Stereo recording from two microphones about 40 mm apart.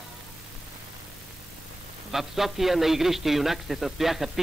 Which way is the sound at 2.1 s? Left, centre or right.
Centre.